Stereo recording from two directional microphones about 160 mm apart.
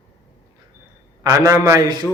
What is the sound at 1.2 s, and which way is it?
Speech, 20° right (ahead or behind).